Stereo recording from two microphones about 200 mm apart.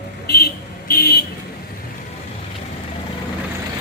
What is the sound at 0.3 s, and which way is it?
Vehicle, 50° left (ahead or behind).